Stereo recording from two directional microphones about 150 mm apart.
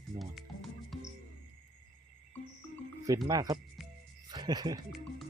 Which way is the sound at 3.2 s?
25° right (ahead or behind).